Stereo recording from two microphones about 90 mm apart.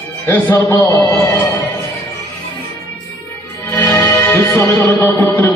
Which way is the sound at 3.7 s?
30° left (ahead or behind).